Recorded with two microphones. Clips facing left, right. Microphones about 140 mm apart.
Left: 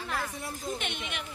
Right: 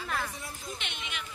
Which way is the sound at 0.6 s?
50° left (ahead or behind).